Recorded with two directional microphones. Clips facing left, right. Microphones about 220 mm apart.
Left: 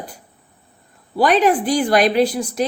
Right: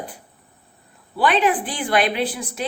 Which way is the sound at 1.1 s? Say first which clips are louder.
Left 4 dB; 40° left (ahead or behind).